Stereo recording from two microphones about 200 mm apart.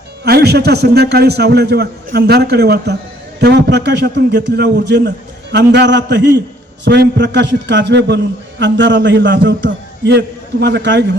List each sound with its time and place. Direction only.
0.3 s a man's voice: 55° right (ahead or behind)